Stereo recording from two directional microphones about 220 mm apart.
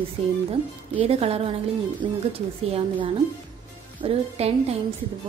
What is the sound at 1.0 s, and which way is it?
A woman's voice, 25° right (ahead or behind).